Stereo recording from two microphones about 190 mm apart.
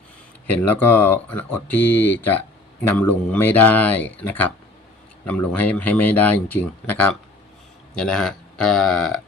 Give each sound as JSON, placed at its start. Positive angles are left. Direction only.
{"t": 0.6, "sound": "speech", "side_deg": 10}